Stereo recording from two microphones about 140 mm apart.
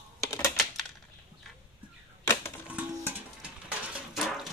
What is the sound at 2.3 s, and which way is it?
Typewriter, 20° left (ahead or behind).